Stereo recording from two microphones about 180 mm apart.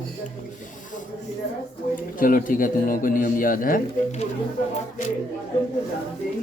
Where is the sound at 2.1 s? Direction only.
50° left (ahead or behind).